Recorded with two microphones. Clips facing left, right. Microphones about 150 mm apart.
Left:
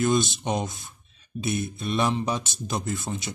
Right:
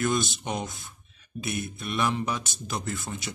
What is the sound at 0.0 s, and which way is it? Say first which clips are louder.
Speech: left 4 dB; 25° left (ahead or behind).